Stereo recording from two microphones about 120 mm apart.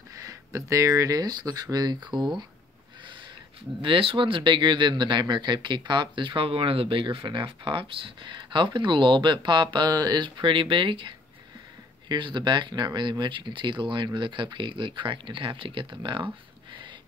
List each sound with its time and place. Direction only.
0.1 s speech: 25° right (ahead or behind)
3.8 s speech: 45° right (ahead or behind)